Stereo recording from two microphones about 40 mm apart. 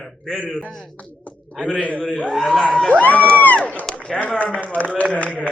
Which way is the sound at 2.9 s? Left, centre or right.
Left.